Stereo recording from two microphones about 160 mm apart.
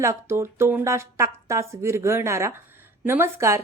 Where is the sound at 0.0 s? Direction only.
15° right (ahead or behind).